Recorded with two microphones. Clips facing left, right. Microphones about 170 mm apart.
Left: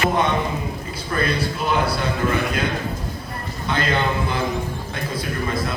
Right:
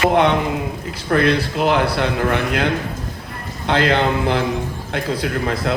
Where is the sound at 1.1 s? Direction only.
75° right (ahead or behind).